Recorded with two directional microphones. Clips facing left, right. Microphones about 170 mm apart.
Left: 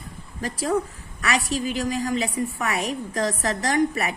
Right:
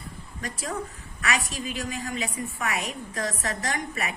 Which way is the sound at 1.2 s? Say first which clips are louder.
Left 5 dB; 40° left (ahead or behind).